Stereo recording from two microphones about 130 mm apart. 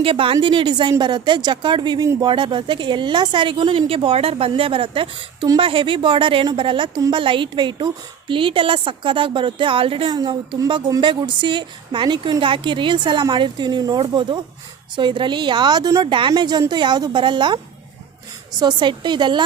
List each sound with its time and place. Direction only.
0.0 s a woman's voice: 40° right (ahead or behind)
18.6 s speech: 35° right (ahead or behind)